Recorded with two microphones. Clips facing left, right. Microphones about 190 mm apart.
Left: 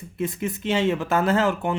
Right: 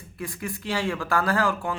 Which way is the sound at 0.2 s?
20° left (ahead or behind).